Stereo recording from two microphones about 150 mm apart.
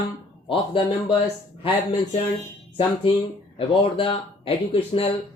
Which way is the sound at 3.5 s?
35° left (ahead or behind).